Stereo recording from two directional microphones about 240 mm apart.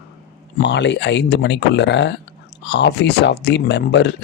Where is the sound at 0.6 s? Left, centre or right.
Left.